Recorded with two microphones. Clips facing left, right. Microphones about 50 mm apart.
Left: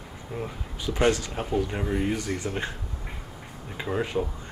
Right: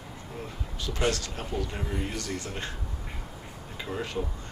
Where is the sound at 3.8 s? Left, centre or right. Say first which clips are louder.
Left 5 dB; left.